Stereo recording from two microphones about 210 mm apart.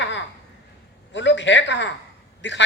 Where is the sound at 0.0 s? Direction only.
60° left (ahead or behind).